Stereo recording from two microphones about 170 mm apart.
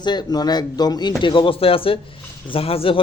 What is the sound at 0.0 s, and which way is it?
A man's voice, 25° left (ahead or behind).